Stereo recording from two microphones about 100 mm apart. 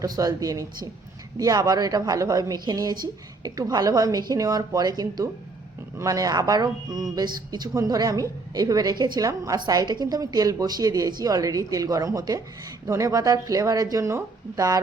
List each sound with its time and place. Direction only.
0.0 s a woman's voice: 35° right (ahead or behind)